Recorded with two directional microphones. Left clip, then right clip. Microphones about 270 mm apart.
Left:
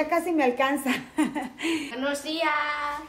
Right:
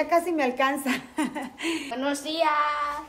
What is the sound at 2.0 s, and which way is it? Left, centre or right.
Speech, centre.